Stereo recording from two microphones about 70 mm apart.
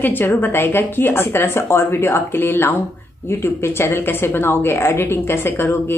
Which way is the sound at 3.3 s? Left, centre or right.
Left.